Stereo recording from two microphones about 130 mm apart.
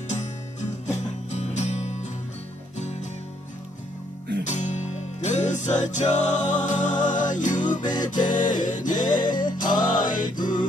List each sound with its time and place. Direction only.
0.1 s music: 65° left (ahead or behind)
4.5 s music: 65° left (ahead or behind); by 10.6 s 90° left